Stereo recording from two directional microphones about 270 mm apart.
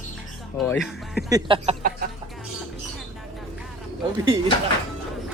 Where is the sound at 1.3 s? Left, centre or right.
Centre.